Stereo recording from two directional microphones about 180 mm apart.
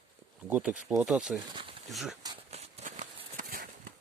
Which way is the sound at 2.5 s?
35° right (ahead or behind).